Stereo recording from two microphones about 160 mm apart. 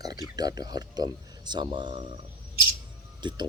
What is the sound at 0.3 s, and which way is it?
Speech, 25° right (ahead or behind).